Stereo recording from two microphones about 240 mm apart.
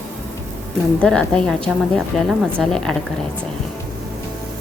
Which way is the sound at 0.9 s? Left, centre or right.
Centre.